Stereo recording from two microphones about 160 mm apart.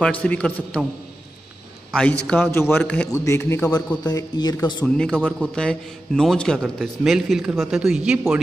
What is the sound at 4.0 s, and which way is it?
Speech, 25° left (ahead or behind).